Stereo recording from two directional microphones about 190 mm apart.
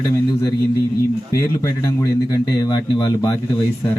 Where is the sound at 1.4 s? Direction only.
20° left (ahead or behind).